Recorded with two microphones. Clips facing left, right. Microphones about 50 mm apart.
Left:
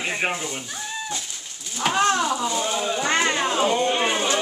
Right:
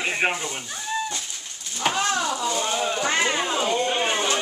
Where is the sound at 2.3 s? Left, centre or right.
Centre.